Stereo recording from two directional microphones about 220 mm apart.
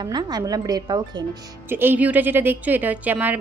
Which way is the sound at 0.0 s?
20° right (ahead or behind).